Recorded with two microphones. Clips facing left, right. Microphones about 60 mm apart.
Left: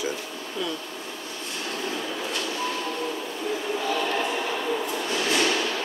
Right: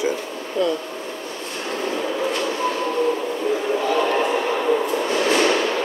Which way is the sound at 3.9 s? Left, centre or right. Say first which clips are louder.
Right 7 dB; right.